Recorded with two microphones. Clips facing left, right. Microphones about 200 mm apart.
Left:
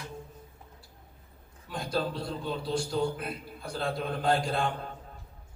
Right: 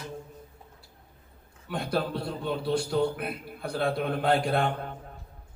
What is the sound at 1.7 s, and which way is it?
A man's voice, 60° right (ahead or behind).